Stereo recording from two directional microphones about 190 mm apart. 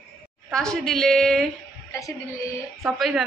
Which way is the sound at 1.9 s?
15° left (ahead or behind).